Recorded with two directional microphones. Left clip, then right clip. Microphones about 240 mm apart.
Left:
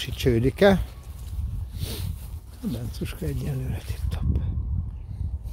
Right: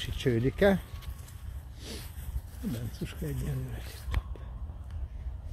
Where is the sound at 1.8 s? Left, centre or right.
Left.